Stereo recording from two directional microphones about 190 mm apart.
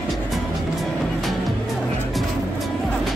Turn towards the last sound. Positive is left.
turn(degrees=0)  # may be behind; listen again after turning